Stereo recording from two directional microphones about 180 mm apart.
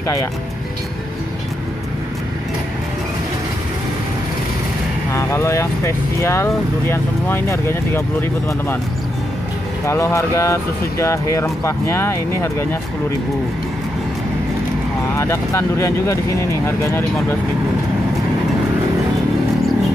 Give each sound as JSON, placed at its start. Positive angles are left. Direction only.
{"t": 5.1, "sound": "speech", "side_deg": 15}
{"t": 9.8, "sound": "speech", "side_deg": 15}
{"t": 15.1, "sound": "speech", "side_deg": 15}